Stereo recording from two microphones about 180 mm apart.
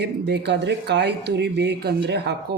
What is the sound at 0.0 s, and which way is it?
Speech, 75° right (ahead or behind).